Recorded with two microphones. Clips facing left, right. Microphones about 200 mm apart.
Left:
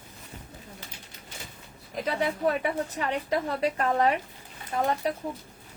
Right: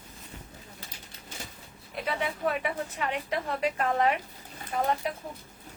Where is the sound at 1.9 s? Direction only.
40° left (ahead or behind).